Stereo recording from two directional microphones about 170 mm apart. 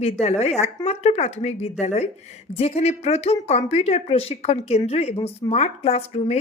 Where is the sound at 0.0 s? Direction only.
40° left (ahead or behind).